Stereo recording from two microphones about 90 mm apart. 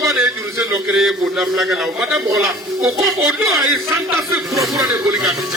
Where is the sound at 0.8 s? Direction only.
5° right (ahead or behind).